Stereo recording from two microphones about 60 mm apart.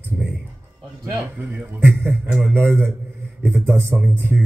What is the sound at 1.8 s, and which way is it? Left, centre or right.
A man's voice, right.